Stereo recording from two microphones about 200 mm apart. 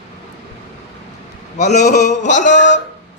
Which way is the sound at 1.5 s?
35° left (ahead or behind).